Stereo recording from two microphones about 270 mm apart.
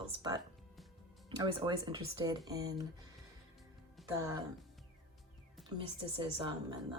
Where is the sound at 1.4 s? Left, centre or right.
Centre.